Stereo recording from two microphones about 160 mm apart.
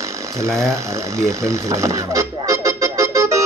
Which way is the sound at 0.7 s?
20° right (ahead or behind).